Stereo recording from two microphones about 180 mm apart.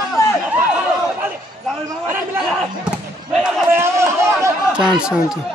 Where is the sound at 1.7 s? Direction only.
10° right (ahead or behind).